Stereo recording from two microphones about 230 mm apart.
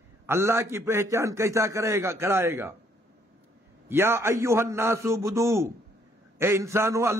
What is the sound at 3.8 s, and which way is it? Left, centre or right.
A man's voice, centre.